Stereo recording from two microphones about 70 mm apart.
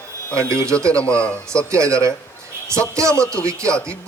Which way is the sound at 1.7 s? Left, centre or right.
Right.